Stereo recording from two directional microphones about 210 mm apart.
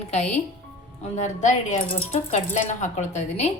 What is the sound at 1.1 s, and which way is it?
Speech, 35° left (ahead or behind).